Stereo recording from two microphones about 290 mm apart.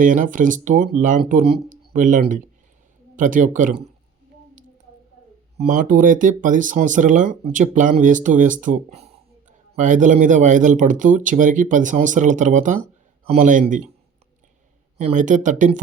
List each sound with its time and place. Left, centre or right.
0.0 s speech: right
5.5 s speech: right
14.9 s speech: right